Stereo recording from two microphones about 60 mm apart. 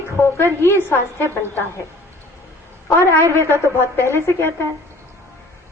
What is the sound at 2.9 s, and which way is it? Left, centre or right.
A woman's voice, left.